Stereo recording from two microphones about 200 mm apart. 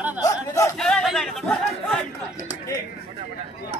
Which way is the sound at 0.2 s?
15° left (ahead or behind).